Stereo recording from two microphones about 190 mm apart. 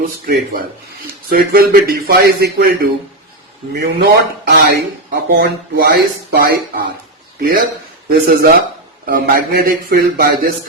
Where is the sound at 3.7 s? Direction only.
60° right (ahead or behind).